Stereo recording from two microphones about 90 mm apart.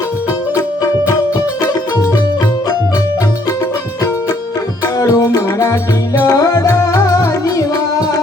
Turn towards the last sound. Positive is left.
turn(degrees=40)  # may be behind; listen again after turning